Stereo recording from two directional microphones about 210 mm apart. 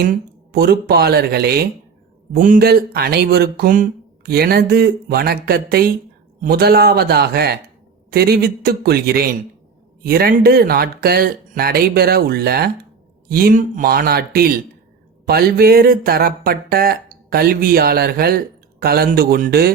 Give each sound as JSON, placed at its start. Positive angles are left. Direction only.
{"t": 0.0, "sound": "speech", "side_deg": -45}